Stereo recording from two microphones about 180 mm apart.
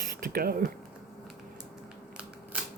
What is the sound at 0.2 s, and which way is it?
Speech, 60° right (ahead or behind).